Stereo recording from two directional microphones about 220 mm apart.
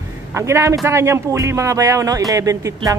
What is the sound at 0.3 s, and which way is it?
Speech, 10° right (ahead or behind).